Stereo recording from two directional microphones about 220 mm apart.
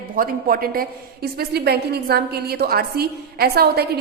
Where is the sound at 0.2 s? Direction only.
40° right (ahead or behind).